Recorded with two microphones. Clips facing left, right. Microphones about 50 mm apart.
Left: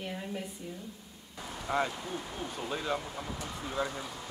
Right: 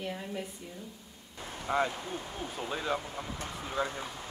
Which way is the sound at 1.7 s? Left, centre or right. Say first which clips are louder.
Right 1 dB; centre.